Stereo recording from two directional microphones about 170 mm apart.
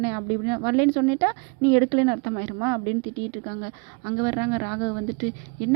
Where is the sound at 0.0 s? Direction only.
25° right (ahead or behind).